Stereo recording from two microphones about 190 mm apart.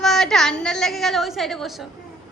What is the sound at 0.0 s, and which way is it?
A woman's voice, centre (ahead or behind).